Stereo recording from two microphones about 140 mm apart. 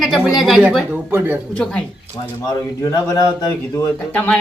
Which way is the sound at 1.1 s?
15° right (ahead or behind).